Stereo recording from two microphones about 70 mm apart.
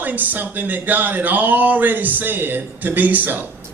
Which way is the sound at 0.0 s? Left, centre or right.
Right.